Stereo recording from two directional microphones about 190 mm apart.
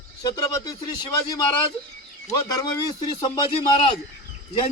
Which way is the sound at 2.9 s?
25° left (ahead or behind).